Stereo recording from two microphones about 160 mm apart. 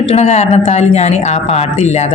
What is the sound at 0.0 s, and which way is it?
Speech, 40° left (ahead or behind).